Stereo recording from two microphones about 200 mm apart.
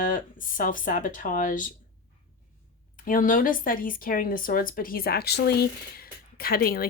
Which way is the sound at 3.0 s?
40° left (ahead or behind).